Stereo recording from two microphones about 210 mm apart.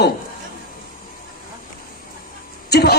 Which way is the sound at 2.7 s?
50° left (ahead or behind).